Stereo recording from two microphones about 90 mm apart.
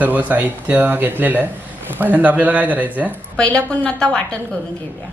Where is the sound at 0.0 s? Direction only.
20° right (ahead or behind).